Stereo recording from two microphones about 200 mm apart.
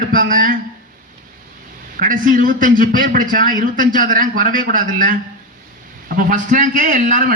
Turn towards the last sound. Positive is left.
turn(degrees=-40)  # may be behind; listen again after turning